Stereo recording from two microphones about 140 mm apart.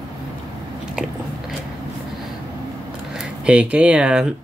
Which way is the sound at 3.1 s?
5° right (ahead or behind).